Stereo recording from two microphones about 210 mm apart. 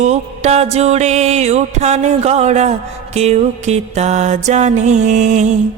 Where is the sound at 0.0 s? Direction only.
30° right (ahead or behind).